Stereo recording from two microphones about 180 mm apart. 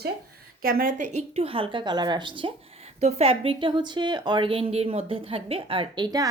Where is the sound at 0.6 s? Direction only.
55° right (ahead or behind).